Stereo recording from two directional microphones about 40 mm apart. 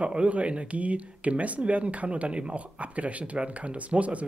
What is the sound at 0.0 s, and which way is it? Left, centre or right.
Speech, right.